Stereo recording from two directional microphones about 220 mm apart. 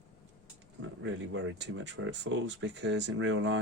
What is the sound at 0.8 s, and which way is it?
Speech, 60° right (ahead or behind).